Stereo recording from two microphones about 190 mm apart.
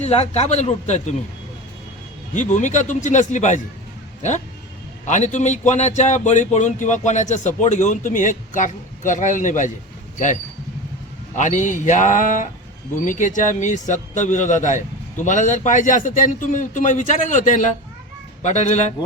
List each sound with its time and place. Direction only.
0.0 s speech: 35° left (ahead or behind)
2.3 s speech: 40° left (ahead or behind)
5.0 s speech: 40° left (ahead or behind)
11.3 s speech: 40° left (ahead or behind)